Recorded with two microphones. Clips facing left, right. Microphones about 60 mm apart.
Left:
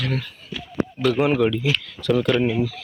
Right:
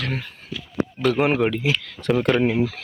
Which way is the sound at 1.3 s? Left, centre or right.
Right.